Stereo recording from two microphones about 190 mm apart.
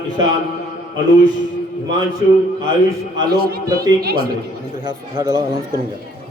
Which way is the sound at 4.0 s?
55° right (ahead or behind).